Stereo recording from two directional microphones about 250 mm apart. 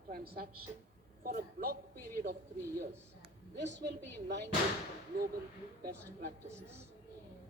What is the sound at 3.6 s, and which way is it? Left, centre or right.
Speech, right.